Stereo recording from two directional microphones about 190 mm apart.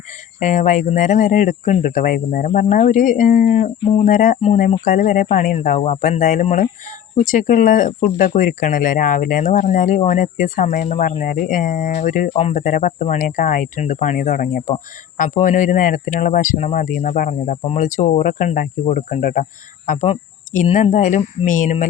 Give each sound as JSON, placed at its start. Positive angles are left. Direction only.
{"t": 0.3, "sound": "speech", "side_deg": 40}